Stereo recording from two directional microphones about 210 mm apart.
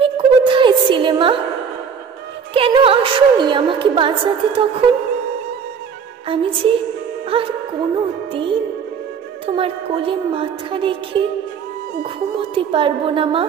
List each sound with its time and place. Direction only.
0.0 s music: 25° right (ahead or behind)
2.5 s a woman's voice: 25° right (ahead or behind)
6.2 s a woman's voice: 25° right (ahead or behind)
8.0 s music: 25° right (ahead or behind)
9.5 s a woman's voice: 25° right (ahead or behind)